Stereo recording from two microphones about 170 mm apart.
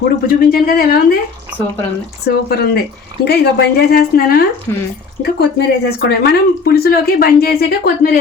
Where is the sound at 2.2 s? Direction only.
65° left (ahead or behind).